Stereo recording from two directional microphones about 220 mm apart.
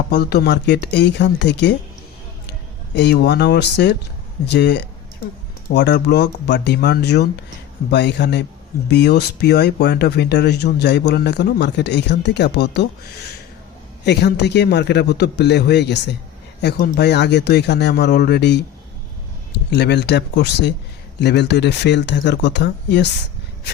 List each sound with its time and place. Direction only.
0.1 s speech: 50° left (ahead or behind)
2.9 s speech: 50° left (ahead or behind)
19.7 s speech: 50° left (ahead or behind)